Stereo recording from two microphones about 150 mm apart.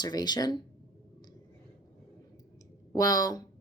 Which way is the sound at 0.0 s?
30° left (ahead or behind).